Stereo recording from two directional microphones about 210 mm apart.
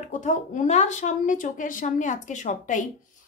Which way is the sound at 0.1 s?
35° left (ahead or behind).